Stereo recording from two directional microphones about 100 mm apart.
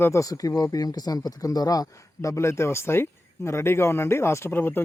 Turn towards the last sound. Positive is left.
turn(degrees=20)  # may be behind; listen again after turning